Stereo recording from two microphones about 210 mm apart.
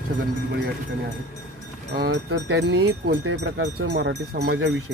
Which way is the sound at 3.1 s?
90° right.